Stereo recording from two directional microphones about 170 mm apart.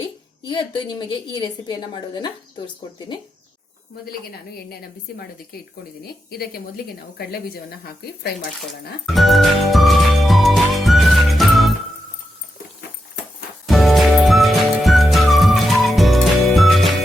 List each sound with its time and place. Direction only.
0.4 s a woman's voice: 25° left (ahead or behind)
4.3 s a woman's voice: 65° left (ahead or behind)
9.0 s music: centre (ahead or behind)
13.7 s music: centre (ahead or behind)